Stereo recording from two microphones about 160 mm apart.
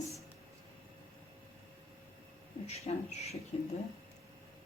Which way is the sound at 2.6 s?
40° left (ahead or behind).